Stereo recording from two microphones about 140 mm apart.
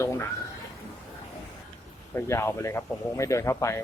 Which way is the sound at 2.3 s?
20° left (ahead or behind).